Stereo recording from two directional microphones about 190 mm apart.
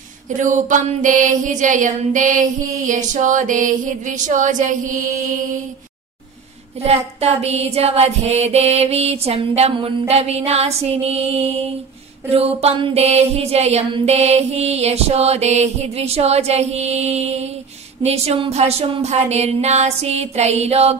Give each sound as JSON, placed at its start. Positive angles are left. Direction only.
{"t": 0.3, "sound": "music", "side_deg": -40}
{"t": 6.8, "sound": "music", "side_deg": -35}